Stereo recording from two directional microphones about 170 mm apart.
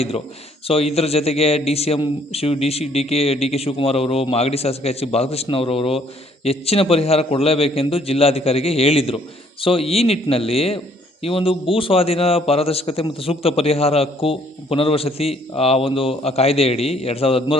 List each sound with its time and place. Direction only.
0.7 s a man's voice: 35° left (ahead or behind)